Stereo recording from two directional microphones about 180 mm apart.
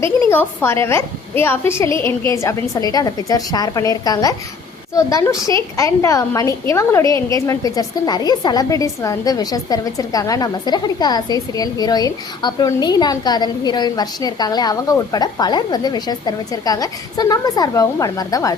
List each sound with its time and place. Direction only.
0.3 s a woman's voice: 15° left (ahead or behind)